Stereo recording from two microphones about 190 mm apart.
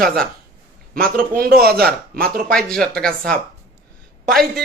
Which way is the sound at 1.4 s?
55° right (ahead or behind).